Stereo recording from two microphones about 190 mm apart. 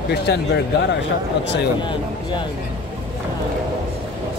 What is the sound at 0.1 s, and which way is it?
Speech, 60° left (ahead or behind).